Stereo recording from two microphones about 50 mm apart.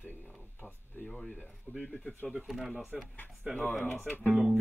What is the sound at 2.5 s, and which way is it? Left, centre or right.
Speech, centre.